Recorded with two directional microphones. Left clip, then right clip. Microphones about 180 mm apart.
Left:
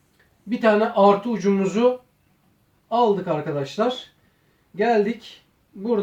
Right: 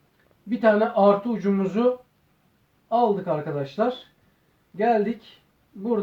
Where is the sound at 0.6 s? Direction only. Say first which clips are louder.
Left 2 dB; 15° left (ahead or behind).